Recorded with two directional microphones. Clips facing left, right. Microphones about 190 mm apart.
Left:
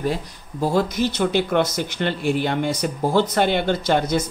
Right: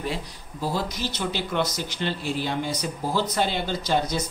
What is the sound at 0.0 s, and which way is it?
Speech, 50° left (ahead or behind).